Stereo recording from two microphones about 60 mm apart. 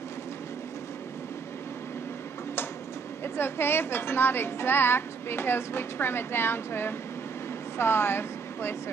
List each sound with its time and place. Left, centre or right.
3.3 s a woman's voice: left